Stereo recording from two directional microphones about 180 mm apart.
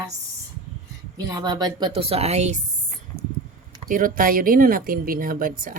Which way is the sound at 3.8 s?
50° right (ahead or behind).